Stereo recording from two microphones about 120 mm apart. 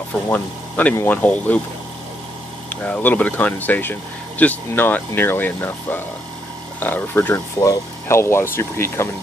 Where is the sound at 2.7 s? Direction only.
15° left (ahead or behind).